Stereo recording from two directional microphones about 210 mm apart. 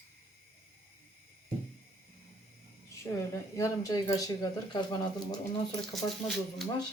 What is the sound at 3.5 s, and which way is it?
Speech, 15° left (ahead or behind).